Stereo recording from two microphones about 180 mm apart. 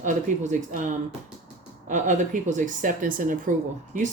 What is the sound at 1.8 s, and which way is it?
Speech, 45° right (ahead or behind).